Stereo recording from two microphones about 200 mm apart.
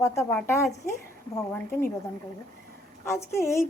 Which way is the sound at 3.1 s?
15° left (ahead or behind).